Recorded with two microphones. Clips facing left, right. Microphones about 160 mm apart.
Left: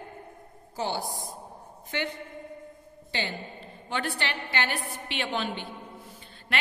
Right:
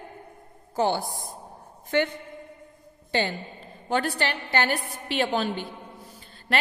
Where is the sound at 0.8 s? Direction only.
55° right (ahead or behind).